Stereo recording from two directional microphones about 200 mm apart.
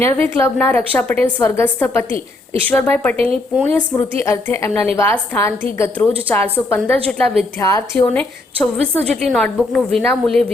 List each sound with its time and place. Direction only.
0.0 s a woman's voice: 10° left (ahead or behind)
2.1 s a woman's voice: 25° right (ahead or behind)
2.6 s a woman's voice: 10° left (ahead or behind)
7.6 s a woman's voice: 15° left (ahead or behind)
8.0 s a woman's voice: 5° left (ahead or behind)